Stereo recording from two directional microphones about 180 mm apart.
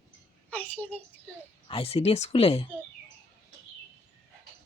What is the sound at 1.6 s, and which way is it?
Speech, 30° left (ahead or behind).